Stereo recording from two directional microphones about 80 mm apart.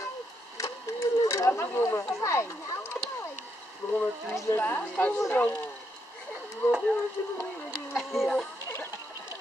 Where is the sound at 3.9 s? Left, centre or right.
Left.